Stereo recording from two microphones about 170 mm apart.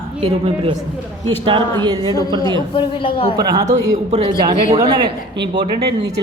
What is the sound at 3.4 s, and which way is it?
Speech, 25° right (ahead or behind).